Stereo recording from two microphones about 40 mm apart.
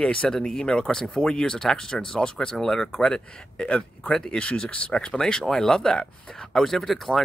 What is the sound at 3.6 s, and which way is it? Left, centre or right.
Speech, left.